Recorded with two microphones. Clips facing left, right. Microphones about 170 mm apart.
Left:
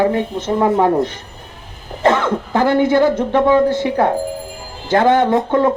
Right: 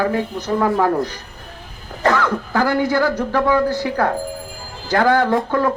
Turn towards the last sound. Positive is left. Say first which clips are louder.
# left 3 dB
turn(degrees=20)  # may be behind; listen again after turning